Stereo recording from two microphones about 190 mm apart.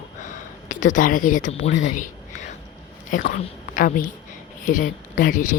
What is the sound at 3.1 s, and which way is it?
Speech, 45° left (ahead or behind).